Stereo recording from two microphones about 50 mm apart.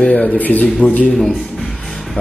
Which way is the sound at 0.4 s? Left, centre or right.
Left.